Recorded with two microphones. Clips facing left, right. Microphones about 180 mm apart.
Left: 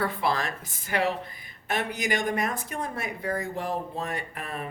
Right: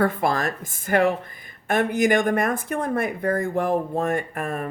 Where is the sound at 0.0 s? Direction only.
50° right (ahead or behind).